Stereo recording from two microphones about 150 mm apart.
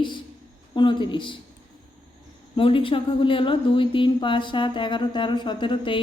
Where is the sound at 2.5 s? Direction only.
35° left (ahead or behind).